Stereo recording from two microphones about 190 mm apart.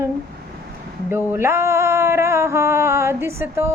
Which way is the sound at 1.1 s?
10° right (ahead or behind).